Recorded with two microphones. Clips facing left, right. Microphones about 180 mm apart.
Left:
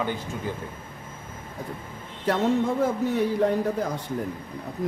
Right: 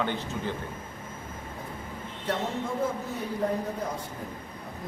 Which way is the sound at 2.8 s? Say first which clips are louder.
Left 7 dB; 90° left.